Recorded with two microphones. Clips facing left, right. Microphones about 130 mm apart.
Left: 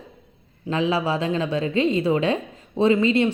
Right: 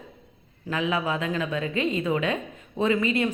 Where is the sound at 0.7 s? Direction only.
30° left (ahead or behind).